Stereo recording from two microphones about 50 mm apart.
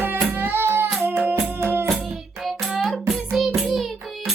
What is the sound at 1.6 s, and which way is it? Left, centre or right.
Music, right.